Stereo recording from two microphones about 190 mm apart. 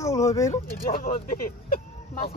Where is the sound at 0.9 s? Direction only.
50° left (ahead or behind).